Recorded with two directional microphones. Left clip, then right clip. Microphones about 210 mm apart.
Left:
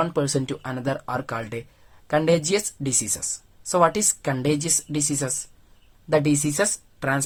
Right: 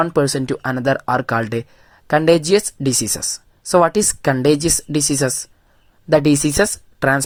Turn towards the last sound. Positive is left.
turn(degrees=-30)  # may be behind; listen again after turning